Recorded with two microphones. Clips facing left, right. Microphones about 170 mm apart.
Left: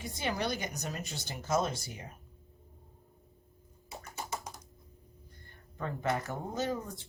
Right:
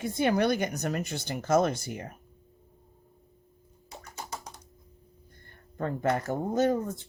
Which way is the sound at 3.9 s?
Centre (ahead or behind).